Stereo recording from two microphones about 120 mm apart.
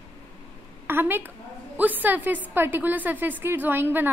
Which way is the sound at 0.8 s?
15° right (ahead or behind).